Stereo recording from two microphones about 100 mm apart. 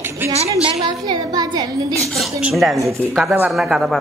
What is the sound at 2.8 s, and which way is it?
Speech, 30° right (ahead or behind).